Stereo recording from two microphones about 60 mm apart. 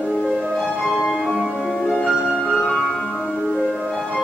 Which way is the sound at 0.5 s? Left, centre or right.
Centre.